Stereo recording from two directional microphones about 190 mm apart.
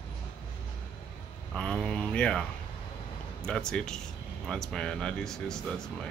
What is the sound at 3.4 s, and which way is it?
Speech, 5° left (ahead or behind).